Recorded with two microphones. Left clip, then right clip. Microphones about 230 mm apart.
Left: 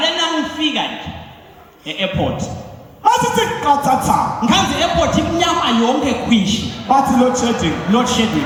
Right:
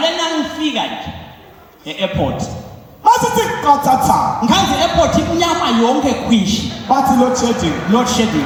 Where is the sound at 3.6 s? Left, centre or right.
Left.